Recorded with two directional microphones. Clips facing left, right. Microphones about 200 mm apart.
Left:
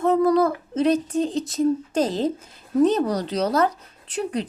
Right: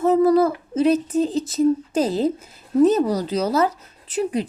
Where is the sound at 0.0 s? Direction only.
5° right (ahead or behind).